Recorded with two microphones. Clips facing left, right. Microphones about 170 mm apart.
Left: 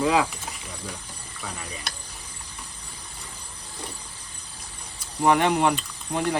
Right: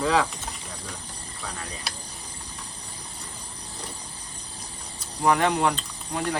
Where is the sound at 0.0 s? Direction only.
15° left (ahead or behind).